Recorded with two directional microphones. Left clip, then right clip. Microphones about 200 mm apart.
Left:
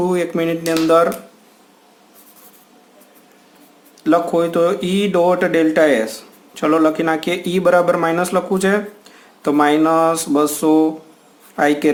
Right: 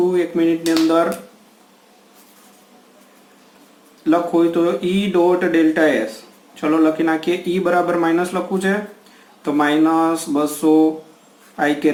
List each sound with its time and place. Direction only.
0.1 s speech: 55° left (ahead or behind)
4.0 s speech: 55° left (ahead or behind)